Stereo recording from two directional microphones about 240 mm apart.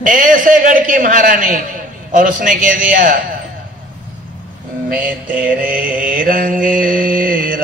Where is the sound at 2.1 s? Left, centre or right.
Right.